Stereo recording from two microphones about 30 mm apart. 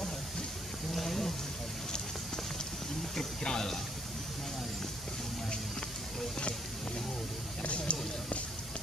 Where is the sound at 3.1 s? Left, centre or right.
Centre.